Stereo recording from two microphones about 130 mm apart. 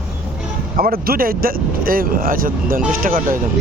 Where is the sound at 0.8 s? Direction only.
90° right.